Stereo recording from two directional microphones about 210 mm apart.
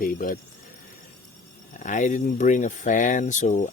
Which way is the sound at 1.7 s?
35° left (ahead or behind).